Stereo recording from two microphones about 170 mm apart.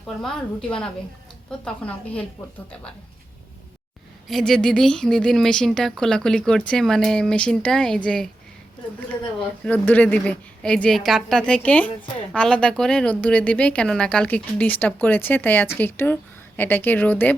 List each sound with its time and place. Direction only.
0.2 s a woman's voice: 5° left (ahead or behind)
4.3 s a woman's voice: centre (ahead or behind)
9.6 s a woman's voice: 10° left (ahead or behind)